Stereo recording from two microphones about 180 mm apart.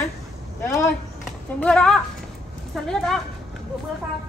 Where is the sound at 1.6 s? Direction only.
5° left (ahead or behind).